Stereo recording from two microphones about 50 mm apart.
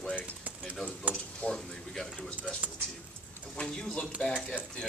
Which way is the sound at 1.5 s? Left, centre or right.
Centre.